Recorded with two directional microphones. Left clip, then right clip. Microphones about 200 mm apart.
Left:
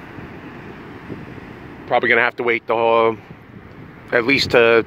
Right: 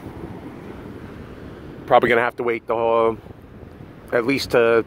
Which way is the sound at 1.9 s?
30° right (ahead or behind).